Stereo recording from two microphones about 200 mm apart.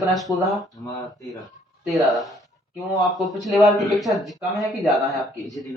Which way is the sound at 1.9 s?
Centre (ahead or behind).